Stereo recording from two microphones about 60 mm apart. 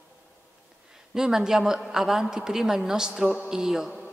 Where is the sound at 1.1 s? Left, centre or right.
Centre.